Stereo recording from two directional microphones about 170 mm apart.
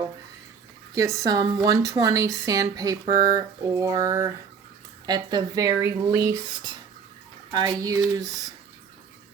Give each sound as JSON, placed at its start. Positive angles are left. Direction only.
{"t": 0.9, "sound": "a woman's voice", "side_deg": -20}